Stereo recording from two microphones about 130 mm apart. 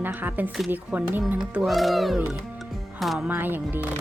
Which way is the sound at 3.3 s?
15° right (ahead or behind).